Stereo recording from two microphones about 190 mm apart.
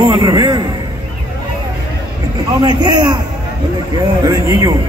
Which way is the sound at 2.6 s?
20° right (ahead or behind).